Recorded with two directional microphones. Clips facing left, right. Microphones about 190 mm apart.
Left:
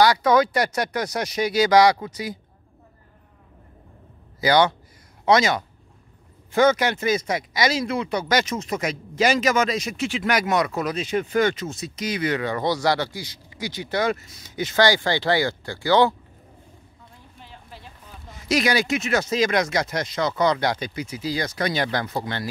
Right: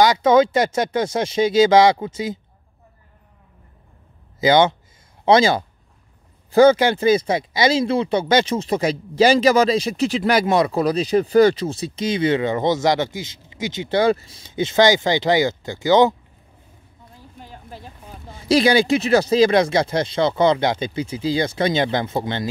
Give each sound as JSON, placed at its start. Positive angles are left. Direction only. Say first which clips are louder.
{"t": 0.0, "sound": "speech", "louder": "right 3 dB", "side_deg": -20}
{"t": 4.4, "sound": "speech", "louder": "right 3 dB", "side_deg": -25}
{"t": 17.4, "sound": "a sound", "louder": "right 6 dB", "side_deg": -45}
{"t": 18.3, "sound": "speech", "louder": "right 6 dB", "side_deg": -30}